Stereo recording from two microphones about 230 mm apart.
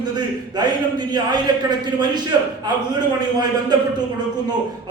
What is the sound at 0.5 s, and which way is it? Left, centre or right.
A man's voice, centre.